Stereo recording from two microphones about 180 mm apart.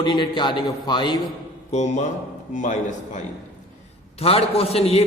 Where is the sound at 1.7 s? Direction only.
40° left (ahead or behind).